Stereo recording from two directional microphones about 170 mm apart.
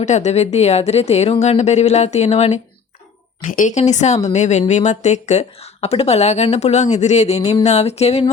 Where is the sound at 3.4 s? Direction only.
50° left (ahead or behind).